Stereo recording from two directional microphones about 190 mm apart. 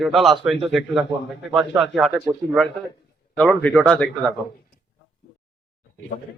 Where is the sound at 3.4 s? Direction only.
10° left (ahead or behind).